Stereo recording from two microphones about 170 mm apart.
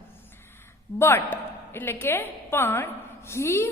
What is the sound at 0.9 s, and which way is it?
A woman's voice, 15° left (ahead or behind).